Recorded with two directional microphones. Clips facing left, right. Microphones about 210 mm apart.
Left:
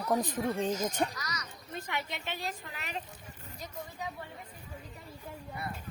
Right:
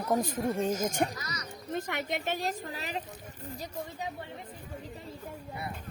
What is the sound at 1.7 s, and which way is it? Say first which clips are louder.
A woman's voice: right 5 dB; 50° right (ahead or behind).